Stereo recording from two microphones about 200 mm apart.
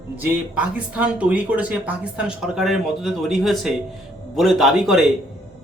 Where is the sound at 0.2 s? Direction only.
5° right (ahead or behind).